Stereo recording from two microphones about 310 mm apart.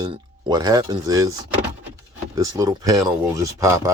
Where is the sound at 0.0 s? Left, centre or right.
Centre.